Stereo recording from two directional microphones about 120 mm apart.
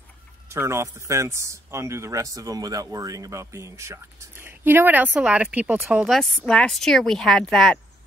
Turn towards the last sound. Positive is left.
turn(degrees=5)  # may be behind; listen again after turning